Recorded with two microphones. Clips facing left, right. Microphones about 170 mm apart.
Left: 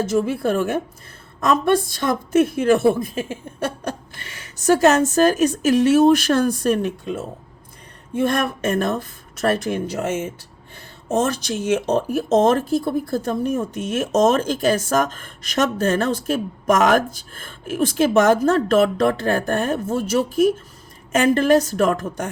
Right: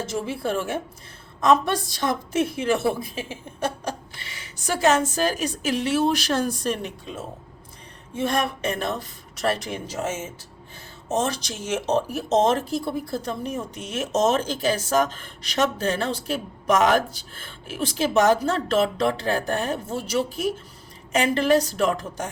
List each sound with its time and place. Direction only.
0.0 s speech: 55° left (ahead or behind)